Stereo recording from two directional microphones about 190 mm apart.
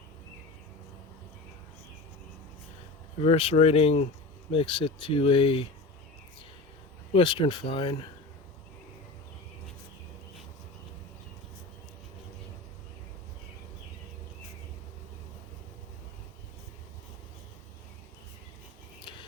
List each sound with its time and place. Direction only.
3.2 s speech: 30° left (ahead or behind)
7.1 s speech: 25° left (ahead or behind)